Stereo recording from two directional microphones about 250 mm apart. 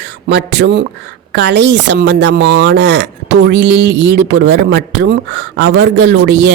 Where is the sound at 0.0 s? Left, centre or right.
Right.